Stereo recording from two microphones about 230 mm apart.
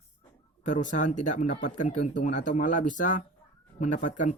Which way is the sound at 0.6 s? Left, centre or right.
Left.